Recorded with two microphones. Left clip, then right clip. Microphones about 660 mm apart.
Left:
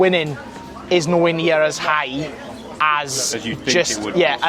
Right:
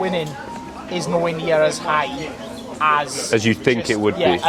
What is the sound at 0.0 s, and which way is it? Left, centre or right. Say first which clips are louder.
Speech: left 6 dB; left.